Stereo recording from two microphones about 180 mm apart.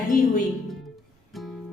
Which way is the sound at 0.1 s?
45° left (ahead or behind).